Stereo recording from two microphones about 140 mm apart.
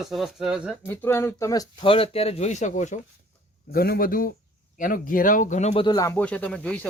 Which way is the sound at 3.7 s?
90° left.